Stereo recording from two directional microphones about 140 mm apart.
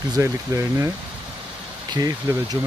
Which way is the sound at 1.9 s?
25° right (ahead or behind).